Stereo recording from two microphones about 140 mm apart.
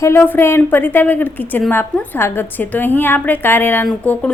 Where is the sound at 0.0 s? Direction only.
15° left (ahead or behind).